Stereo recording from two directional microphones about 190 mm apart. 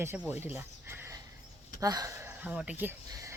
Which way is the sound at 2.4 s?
5° right (ahead or behind).